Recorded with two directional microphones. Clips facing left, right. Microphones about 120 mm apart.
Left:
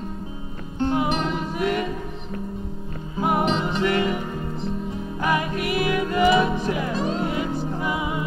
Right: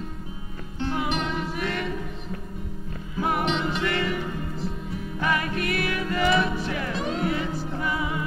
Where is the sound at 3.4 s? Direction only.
35° left (ahead or behind).